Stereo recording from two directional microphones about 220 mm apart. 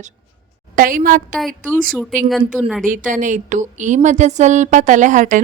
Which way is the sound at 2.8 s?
35° right (ahead or behind).